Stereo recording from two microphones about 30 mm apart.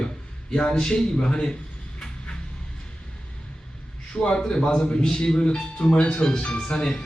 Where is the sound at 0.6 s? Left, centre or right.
Left.